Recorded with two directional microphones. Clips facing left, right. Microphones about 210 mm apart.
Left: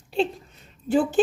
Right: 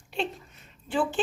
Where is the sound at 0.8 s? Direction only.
40° left (ahead or behind).